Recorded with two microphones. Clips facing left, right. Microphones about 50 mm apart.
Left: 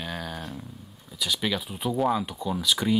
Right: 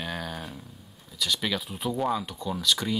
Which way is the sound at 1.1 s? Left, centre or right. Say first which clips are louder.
Left 1 dB; centre.